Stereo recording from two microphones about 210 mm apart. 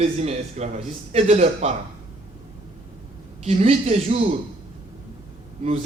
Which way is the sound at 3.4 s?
30° right (ahead or behind).